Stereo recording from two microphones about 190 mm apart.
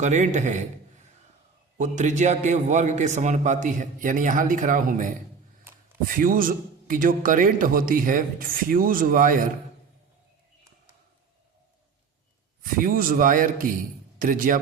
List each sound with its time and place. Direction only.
0.0 s a man's voice: 40° right (ahead or behind)
12.6 s a man's voice: 50° right (ahead or behind)